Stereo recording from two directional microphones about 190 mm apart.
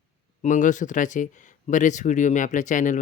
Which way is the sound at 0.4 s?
40° left (ahead or behind).